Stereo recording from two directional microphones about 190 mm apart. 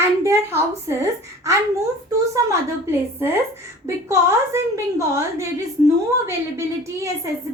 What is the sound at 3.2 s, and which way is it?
A woman's voice, 15° right (ahead or behind).